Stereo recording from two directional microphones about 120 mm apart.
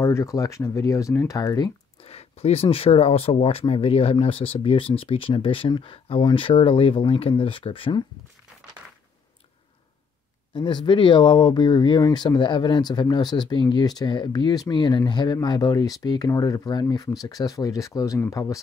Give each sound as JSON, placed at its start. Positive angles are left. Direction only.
{"t": 0.0, "sound": "speech", "side_deg": 25}
{"t": 2.0, "sound": "speech", "side_deg": 60}
{"t": 10.5, "sound": "speech", "side_deg": 40}